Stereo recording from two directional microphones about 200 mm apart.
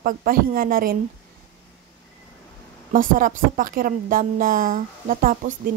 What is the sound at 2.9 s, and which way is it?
A woman's voice, 40° right (ahead or behind).